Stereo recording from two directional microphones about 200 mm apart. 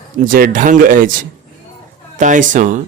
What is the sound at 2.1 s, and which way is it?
Speech, 40° right (ahead or behind).